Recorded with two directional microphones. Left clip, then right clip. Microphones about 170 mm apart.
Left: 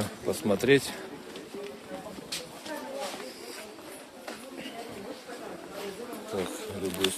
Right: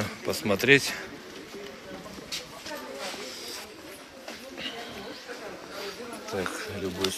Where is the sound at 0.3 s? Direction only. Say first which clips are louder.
Right 3 dB; 15° left (ahead or behind).